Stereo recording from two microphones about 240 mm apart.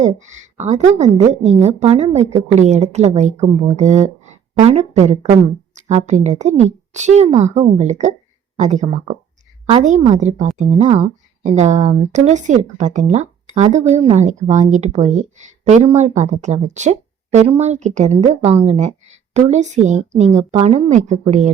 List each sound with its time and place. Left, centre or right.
0.0 s speech: right